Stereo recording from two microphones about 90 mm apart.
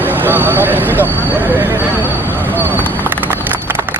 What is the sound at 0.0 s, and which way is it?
Vehicle, 20° right (ahead or behind).